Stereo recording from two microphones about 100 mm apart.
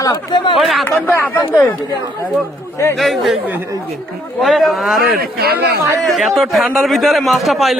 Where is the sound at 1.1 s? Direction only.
20° left (ahead or behind).